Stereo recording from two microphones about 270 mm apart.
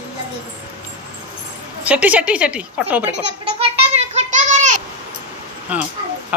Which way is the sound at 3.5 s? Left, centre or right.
Right.